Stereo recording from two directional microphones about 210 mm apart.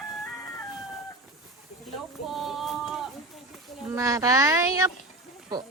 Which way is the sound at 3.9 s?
15° right (ahead or behind).